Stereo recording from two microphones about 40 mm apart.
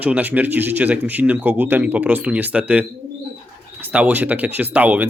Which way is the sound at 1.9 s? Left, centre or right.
Right.